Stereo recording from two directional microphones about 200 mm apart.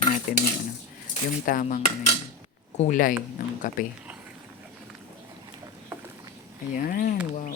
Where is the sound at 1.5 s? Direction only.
40° left (ahead or behind).